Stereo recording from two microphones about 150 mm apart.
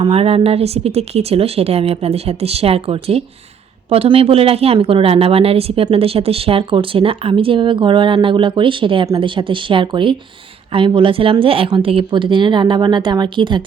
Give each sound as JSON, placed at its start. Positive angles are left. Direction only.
{"t": 0.0, "sound": "a woman's voice", "side_deg": -40}